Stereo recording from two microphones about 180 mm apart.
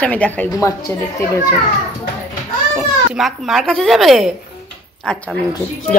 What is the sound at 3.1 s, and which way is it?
Speech, centre (ahead or behind).